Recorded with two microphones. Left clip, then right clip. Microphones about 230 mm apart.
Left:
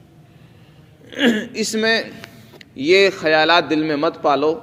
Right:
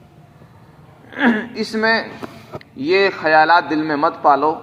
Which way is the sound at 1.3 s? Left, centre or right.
Left.